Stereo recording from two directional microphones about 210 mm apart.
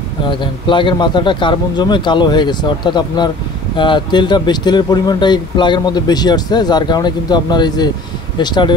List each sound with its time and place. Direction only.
0.3 s speech: 25° left (ahead or behind)